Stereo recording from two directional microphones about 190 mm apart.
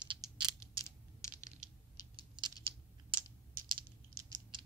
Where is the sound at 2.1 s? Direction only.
25° right (ahead or behind).